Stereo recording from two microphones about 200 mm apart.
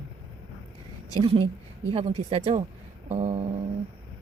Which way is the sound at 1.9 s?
30° right (ahead or behind).